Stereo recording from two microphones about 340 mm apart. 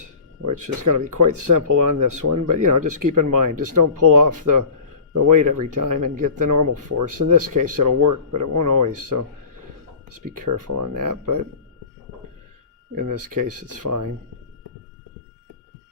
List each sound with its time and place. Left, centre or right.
1.1 s speech: right
10.3 s speech: right
12.9 s speech: right
13.8 s speech: right